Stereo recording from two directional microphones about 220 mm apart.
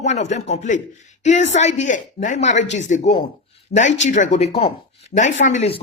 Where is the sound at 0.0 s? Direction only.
30° left (ahead or behind).